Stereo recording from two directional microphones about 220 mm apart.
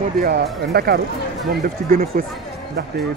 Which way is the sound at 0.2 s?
45° right (ahead or behind).